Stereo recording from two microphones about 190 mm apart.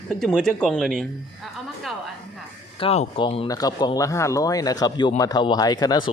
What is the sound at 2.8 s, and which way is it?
Speech, 30° left (ahead or behind).